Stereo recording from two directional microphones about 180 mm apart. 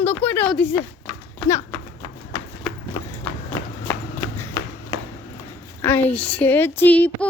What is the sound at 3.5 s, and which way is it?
Run, 15° left (ahead or behind).